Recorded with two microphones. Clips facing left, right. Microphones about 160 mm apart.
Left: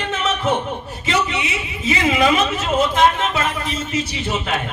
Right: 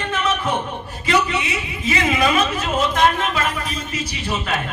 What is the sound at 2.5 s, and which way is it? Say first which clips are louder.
Speech: left 2 dB; 25° left (ahead or behind).